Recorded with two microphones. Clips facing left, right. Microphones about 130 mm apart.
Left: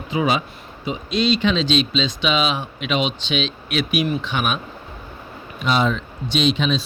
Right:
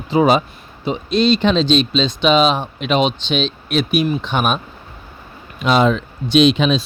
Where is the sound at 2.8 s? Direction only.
5° left (ahead or behind).